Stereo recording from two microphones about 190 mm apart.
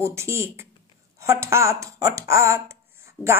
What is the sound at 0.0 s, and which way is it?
Speech, 15° right (ahead or behind).